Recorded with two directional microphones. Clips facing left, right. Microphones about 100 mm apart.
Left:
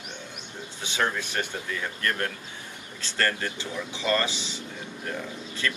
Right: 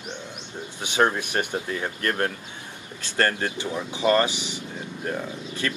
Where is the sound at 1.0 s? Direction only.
30° right (ahead or behind).